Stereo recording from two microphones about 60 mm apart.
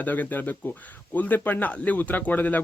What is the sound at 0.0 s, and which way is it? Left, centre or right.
Speech, left.